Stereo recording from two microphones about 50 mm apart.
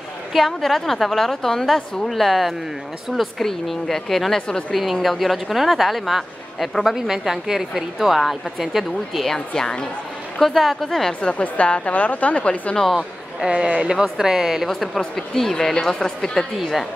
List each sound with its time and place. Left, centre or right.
0.3 s a woman's voice: centre
2.0 s a woman's voice: centre
4.5 s a woman's voice: centre
5.0 s a woman's voice: centre
9.2 s a woman's voice: centre
10.4 s a woman's voice: centre
11.1 s a woman's voice: left
13.5 s speech: right
13.9 s a woman's voice: centre
15.1 s a woman's voice: centre